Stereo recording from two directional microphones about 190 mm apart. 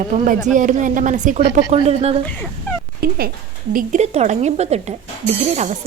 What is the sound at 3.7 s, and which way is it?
A woman's voice, 40° right (ahead or behind).